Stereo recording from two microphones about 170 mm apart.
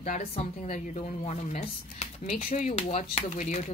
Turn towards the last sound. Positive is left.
turn(degrees=45)  # may be behind; listen again after turning